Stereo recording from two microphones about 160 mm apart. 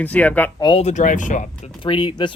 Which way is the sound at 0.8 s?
50° left (ahead or behind).